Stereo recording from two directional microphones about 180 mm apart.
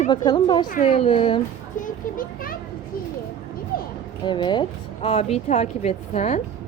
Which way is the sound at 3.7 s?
55° left (ahead or behind).